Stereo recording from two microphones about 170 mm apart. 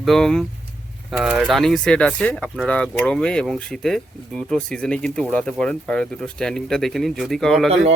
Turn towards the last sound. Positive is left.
turn(degrees=0)  # may be behind; listen again after turning